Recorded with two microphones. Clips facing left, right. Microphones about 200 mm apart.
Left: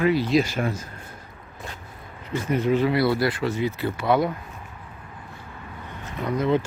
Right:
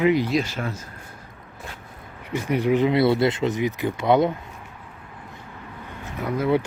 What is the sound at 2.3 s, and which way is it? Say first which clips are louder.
Speech: right 1 dB; 15° right (ahead or behind).